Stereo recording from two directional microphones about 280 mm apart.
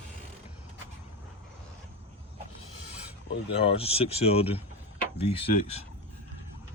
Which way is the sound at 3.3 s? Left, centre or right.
Left.